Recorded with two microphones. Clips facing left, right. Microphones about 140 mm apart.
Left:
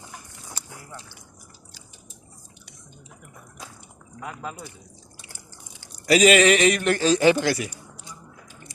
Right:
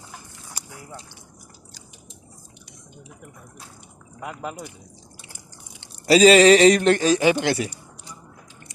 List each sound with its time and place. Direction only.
0.5 s a sound: 15° right (ahead or behind)
4.2 s speech: 15° right (ahead or behind)
5.8 s speech: 30° right (ahead or behind)
7.0 s speech: 15° right (ahead or behind)